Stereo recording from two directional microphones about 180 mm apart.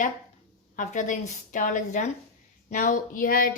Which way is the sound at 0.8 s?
45° left (ahead or behind).